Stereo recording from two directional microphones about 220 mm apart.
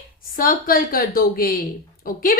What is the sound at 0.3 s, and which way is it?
Speech, 40° left (ahead or behind).